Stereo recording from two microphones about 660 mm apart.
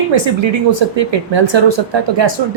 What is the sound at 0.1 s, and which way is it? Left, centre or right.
A woman's voice, right.